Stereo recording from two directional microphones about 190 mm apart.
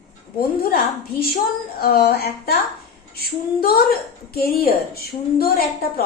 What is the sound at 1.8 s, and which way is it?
A woman's voice, 55° left (ahead or behind).